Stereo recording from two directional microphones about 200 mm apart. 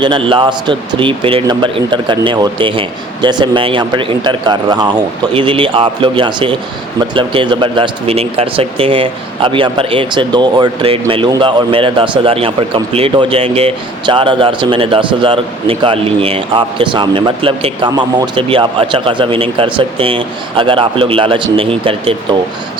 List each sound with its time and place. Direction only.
0.0 s a man's voice: 25° right (ahead or behind)